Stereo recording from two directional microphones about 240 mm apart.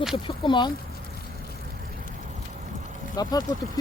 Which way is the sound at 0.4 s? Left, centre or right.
Centre.